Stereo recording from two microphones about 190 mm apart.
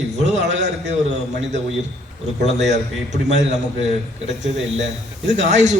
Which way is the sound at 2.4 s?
40° right (ahead or behind).